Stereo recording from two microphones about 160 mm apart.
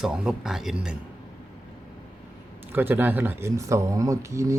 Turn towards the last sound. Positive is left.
turn(degrees=-20)  # may be behind; listen again after turning